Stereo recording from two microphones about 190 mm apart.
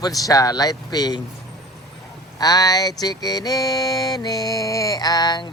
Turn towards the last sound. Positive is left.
turn(degrees=20)  # may be behind; listen again after turning